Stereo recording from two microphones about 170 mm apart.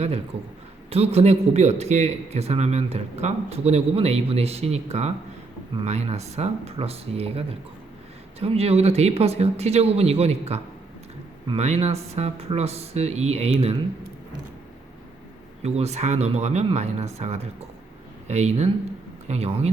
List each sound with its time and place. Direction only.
0.9 s a man's voice: 35° right (ahead or behind)
15.6 s a man's voice: 40° right (ahead or behind)